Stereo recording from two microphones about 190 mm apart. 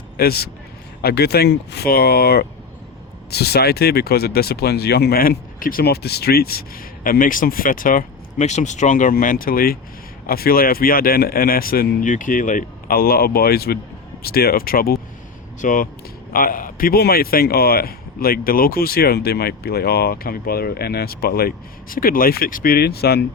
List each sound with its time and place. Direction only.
0.2 s speech: 55° left (ahead or behind)